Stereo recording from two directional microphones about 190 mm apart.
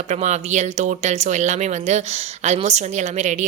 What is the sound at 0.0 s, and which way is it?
Speech, 35° right (ahead or behind).